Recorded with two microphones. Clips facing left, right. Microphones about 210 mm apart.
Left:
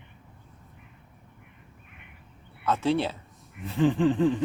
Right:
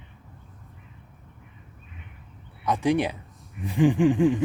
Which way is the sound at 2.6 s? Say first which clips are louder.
Right 2 dB; 15° right (ahead or behind).